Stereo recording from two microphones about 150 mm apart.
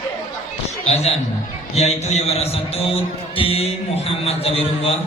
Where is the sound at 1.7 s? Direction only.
45° left (ahead or behind).